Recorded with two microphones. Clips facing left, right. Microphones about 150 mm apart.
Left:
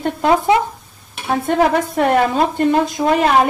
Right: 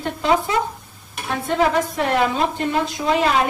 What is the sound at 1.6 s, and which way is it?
A woman's voice, 50° left (ahead or behind).